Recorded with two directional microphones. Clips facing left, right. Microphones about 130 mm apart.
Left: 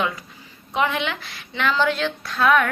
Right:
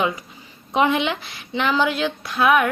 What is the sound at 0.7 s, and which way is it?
Speech, 20° right (ahead or behind).